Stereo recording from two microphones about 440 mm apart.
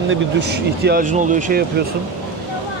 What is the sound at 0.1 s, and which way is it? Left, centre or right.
Speech, right.